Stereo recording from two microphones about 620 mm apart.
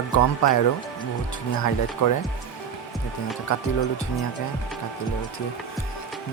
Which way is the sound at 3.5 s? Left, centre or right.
Left.